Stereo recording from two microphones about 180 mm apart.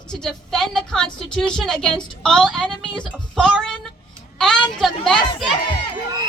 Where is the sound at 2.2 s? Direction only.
5° left (ahead or behind).